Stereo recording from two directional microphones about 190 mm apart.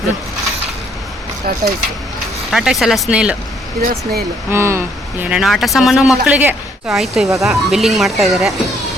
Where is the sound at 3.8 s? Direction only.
50° right (ahead or behind).